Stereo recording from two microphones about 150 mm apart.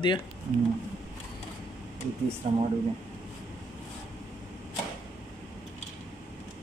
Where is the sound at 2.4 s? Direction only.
40° right (ahead or behind).